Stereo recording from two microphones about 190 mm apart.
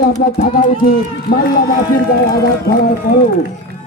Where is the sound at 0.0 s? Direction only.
55° left (ahead or behind).